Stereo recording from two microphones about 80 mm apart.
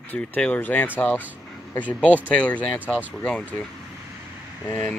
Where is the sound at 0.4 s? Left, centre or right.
Left.